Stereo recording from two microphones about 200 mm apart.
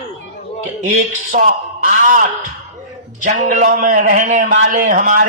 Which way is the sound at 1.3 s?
40° right (ahead or behind).